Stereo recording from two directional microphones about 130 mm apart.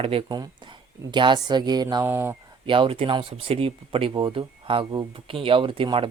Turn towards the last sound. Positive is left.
turn(degrees=-45)  # may be behind; listen again after turning